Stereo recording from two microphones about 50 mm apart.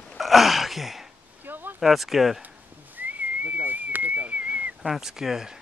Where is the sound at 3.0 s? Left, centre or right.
Right.